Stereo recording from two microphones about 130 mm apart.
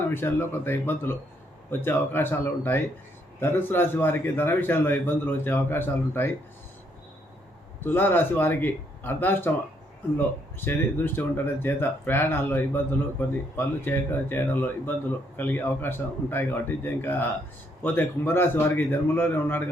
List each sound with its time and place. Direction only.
0.0 s speech: 15° left (ahead or behind)
7.9 s speech: 15° left (ahead or behind)